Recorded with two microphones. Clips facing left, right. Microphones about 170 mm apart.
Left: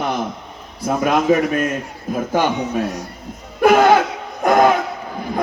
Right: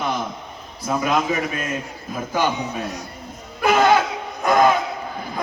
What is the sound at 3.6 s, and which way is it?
Laughter, 55° left (ahead or behind).